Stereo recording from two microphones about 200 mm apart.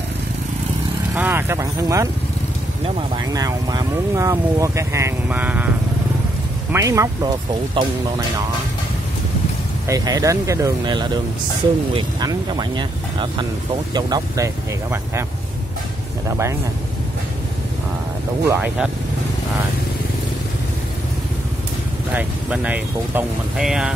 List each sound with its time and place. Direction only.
1.1 s speech: 10° right (ahead or behind)
6.7 s speech: 15° right (ahead or behind)
9.8 s speech: 20° right (ahead or behind)
16.3 s speech: 15° right (ahead or behind)
18.5 s speech: 5° right (ahead or behind)
22.1 s speech: 5° right (ahead or behind)